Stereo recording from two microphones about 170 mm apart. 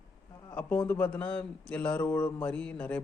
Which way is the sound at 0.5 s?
10° left (ahead or behind).